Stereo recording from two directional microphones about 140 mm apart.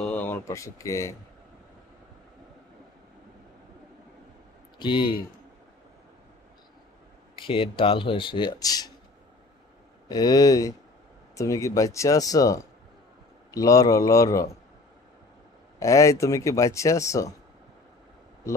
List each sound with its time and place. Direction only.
0.0 s a sound: 10° left (ahead or behind)
4.7 s speech: 35° left (ahead or behind)
7.3 s speech: 40° left (ahead or behind)
10.0 s speech: 30° left (ahead or behind)
15.8 s speech: 20° left (ahead or behind)